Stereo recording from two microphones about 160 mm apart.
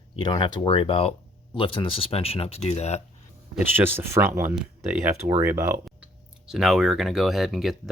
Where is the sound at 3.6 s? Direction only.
15° right (ahead or behind).